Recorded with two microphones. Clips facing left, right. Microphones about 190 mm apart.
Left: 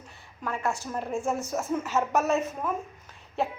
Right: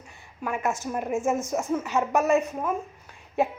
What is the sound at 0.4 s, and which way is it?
A woman's voice, 15° right (ahead or behind).